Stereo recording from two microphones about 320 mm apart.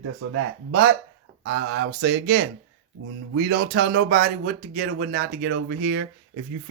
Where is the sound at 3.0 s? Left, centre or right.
Right.